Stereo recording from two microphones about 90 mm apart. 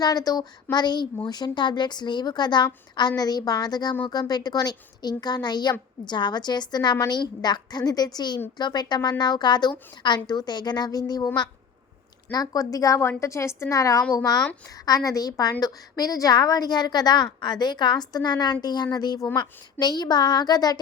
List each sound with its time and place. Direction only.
0.0 s a woman's voice: 45° left (ahead or behind)
12.3 s a woman's voice: 45° left (ahead or behind)
13.0 s a woman's voice: 30° left (ahead or behind); by 20.7 s 50° left (ahead or behind)